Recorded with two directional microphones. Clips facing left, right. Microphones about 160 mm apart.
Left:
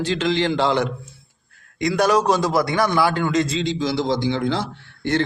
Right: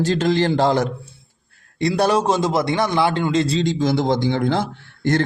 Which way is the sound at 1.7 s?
30° right (ahead or behind).